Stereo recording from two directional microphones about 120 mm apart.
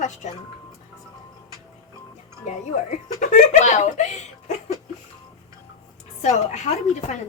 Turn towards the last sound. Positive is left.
turn(degrees=75)  # may be behind; listen again after turning